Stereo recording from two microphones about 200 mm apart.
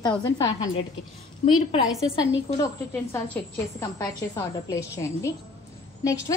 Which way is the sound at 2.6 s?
10° left (ahead or behind).